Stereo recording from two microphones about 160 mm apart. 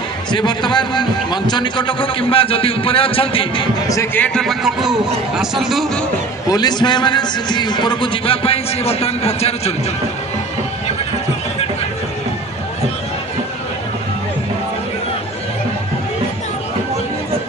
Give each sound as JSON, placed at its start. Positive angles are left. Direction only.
{"t": 0.3, "sound": "a man's voice", "side_deg": 30}
{"t": 3.9, "sound": "a man's voice", "side_deg": 15}
{"t": 6.5, "sound": "a man's voice", "side_deg": 25}